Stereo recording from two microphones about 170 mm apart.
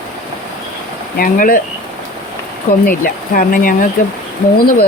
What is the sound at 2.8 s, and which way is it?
Speech, 55° left (ahead or behind).